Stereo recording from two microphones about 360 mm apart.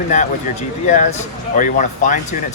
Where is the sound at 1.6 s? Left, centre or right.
Left.